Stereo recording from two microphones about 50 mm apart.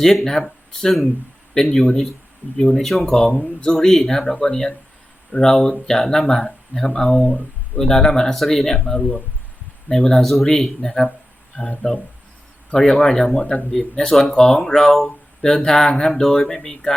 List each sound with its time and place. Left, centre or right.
0.0 s speech: centre
3.1 s speech: centre
9.0 s speech: left
9.9 s speech: centre
11.8 s speech: left
12.7 s speech: centre
13.3 s speech: left
13.9 s speech: centre